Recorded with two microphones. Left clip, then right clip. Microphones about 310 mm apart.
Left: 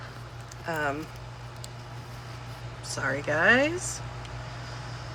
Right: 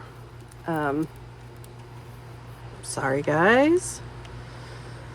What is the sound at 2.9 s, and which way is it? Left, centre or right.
Speech, centre.